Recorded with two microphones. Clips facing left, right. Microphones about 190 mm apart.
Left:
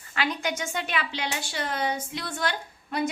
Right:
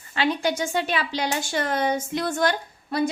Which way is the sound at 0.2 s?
30° right (ahead or behind).